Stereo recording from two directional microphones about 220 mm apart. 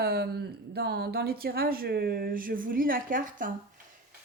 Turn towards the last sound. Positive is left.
turn(degrees=-35)  # may be behind; listen again after turning